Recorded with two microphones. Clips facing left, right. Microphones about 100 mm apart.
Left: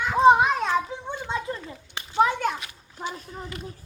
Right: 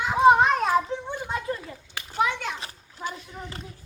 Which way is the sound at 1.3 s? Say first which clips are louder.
Left 2 dB; 25° left (ahead or behind).